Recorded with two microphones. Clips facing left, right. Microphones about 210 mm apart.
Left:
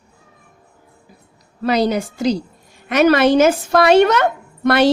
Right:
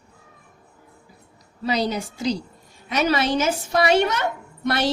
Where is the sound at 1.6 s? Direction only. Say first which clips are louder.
Left 7 dB; 55° left (ahead or behind).